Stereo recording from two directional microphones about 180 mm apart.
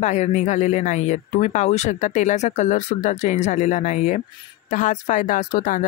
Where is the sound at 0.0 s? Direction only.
40° left (ahead or behind).